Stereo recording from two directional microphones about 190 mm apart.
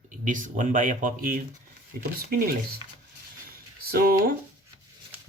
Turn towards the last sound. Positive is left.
turn(degrees=-50)  # may be behind; listen again after turning